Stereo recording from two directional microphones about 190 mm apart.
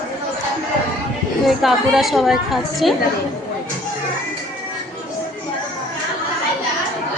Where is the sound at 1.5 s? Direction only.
Centre (ahead or behind).